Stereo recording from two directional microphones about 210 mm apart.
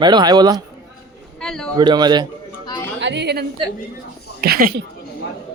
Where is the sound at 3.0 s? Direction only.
55° right (ahead or behind).